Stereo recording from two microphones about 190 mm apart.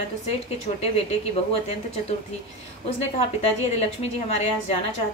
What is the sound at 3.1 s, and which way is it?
A woman's voice, 35° left (ahead or behind).